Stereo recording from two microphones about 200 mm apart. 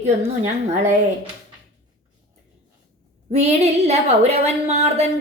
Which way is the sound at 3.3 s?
30° right (ahead or behind).